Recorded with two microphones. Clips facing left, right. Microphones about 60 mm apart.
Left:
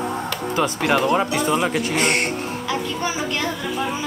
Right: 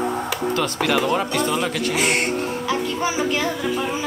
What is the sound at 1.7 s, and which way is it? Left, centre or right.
Speech, left.